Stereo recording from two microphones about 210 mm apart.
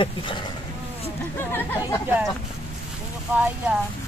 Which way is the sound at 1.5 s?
10° left (ahead or behind).